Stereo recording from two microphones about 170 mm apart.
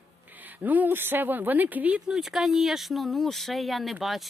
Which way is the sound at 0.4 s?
10° right (ahead or behind).